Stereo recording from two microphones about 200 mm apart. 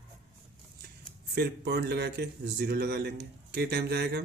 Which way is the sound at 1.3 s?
55° right (ahead or behind).